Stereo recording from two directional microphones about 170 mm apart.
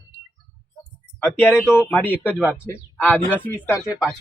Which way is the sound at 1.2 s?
Centre (ahead or behind).